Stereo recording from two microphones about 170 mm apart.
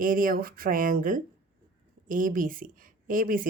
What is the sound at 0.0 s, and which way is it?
A woman's voice, 55° right (ahead or behind).